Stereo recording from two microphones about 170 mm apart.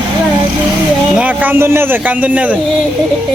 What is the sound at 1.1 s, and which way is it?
Speech, 10° right (ahead or behind).